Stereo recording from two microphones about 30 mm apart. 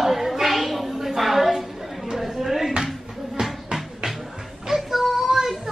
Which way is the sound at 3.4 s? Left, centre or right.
Centre.